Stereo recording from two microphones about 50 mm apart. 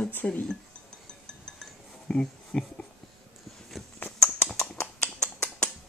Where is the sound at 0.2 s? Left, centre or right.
Left.